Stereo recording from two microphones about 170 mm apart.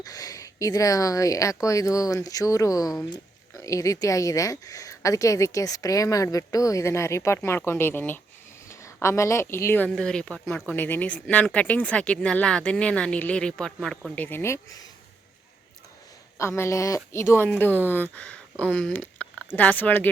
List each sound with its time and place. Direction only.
0.0 s speech: 20° left (ahead or behind)
16.4 s speech: 15° left (ahead or behind)
18.6 s a sound: 5° left (ahead or behind)
19.5 s speech: 10° left (ahead or behind)